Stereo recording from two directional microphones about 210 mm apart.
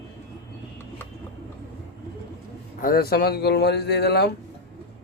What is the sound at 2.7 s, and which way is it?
Speech, 45° left (ahead or behind).